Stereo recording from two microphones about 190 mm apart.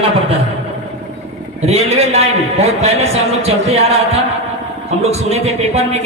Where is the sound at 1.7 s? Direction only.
35° right (ahead or behind).